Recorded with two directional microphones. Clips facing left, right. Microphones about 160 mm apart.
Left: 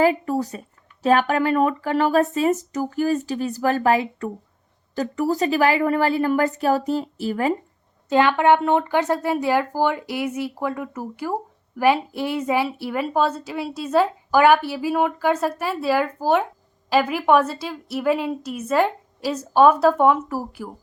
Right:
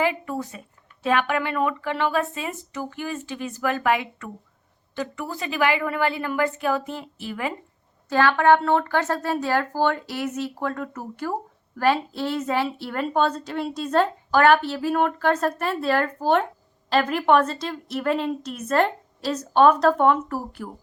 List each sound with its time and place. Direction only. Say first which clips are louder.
0.0 s speech: left 6 dB; 35° left (ahead or behind)
8.1 s speech: left 1 dB; 20° left (ahead or behind)